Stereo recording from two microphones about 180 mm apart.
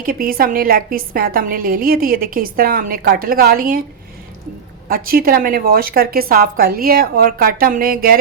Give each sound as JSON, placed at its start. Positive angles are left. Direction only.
{"t": 0.0, "sound": "a woman's voice", "side_deg": -50}
{"t": 4.9, "sound": "a woman's voice", "side_deg": -55}